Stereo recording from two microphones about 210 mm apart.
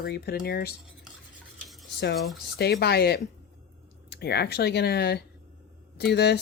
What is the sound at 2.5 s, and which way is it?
Speech, 50° left (ahead or behind).